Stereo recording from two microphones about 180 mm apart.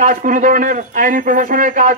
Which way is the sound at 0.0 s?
50° right (ahead or behind).